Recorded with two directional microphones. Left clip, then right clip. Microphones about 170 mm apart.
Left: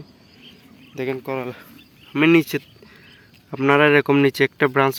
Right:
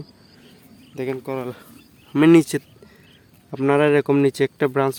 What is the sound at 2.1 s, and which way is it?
Speech, 30° right (ahead or behind).